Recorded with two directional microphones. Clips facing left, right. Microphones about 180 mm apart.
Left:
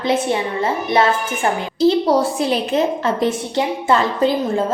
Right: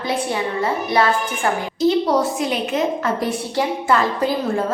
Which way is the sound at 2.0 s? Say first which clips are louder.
Left 3 dB; 30° left (ahead or behind).